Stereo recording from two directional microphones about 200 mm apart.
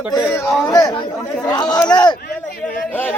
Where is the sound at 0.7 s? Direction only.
20° left (ahead or behind).